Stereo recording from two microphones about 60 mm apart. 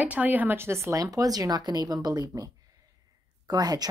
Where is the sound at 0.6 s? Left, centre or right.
Right.